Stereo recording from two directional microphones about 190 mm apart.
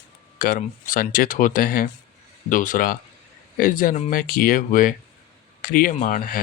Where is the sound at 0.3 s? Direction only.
45° left (ahead or behind).